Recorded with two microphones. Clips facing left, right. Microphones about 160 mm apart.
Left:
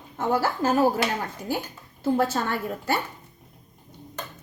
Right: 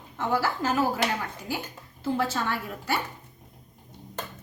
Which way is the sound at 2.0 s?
45° left (ahead or behind).